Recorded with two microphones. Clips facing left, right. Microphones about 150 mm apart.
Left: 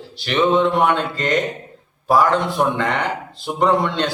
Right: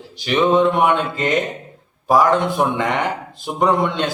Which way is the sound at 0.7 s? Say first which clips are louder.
Right 1 dB; 20° right (ahead or behind).